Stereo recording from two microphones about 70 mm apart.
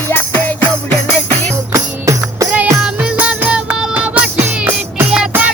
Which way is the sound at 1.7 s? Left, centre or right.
Right.